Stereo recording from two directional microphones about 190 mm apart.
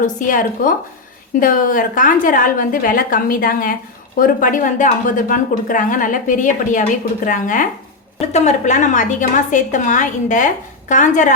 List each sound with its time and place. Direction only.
0.0 s a woman's voice: 45° left (ahead or behind)